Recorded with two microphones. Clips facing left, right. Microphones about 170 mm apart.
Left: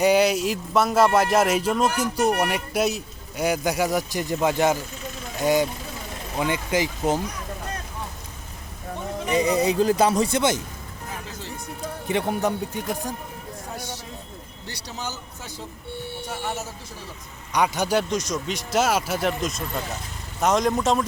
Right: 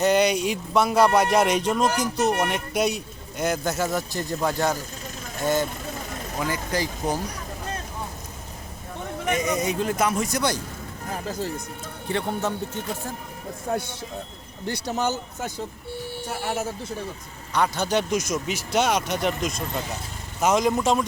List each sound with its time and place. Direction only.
0.0 s a man's voice: 5° left (ahead or behind)
9.3 s speech: 35° left (ahead or behind)
11.1 s speech: 40° right (ahead or behind)
12.0 s a man's voice: 15° left (ahead or behind)
13.7 s speech: 55° right (ahead or behind)
17.5 s a man's voice: 15° left (ahead or behind)
18.1 s speech: 10° right (ahead or behind)